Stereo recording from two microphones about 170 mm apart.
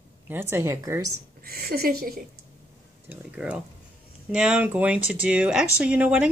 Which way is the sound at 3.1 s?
5° right (ahead or behind).